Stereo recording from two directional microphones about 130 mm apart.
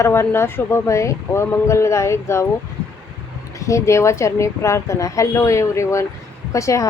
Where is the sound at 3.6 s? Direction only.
25° left (ahead or behind).